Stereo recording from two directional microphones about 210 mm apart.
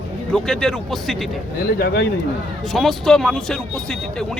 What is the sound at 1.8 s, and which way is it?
Speech, 50° left (ahead or behind).